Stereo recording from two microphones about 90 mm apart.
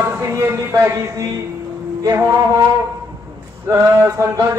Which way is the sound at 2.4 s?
40° right (ahead or behind).